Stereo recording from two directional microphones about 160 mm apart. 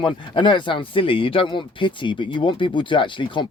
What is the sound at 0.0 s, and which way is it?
Speech, 30° left (ahead or behind).